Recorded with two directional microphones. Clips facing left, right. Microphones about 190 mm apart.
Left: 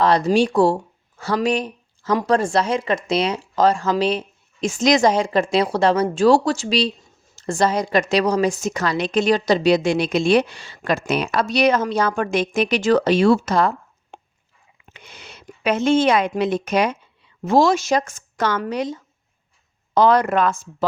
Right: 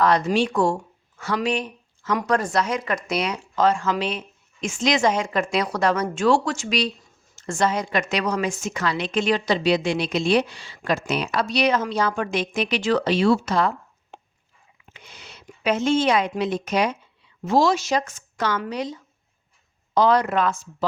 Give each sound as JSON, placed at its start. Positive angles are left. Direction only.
{"t": 0.0, "sound": "a woman's voice", "side_deg": 35}
{"t": 14.9, "sound": "a woman's voice", "side_deg": 55}